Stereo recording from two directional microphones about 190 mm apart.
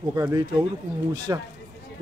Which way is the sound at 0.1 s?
15° right (ahead or behind).